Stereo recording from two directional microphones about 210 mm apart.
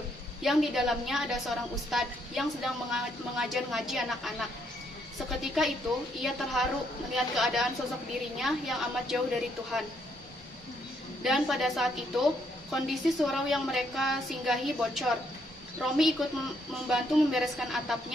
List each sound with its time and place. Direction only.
0.4 s a woman's voice: centre (ahead or behind)
11.2 s a woman's voice: centre (ahead or behind)